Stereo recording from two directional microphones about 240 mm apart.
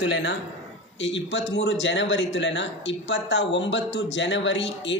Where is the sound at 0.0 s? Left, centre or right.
Left.